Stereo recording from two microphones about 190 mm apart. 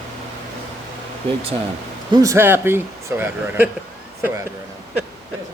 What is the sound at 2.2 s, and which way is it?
Speech, 10° right (ahead or behind).